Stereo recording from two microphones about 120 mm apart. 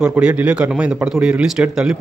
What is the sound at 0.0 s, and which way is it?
A man's voice, 10° right (ahead or behind).